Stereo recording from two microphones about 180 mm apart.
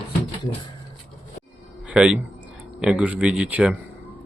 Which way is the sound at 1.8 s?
5° right (ahead or behind).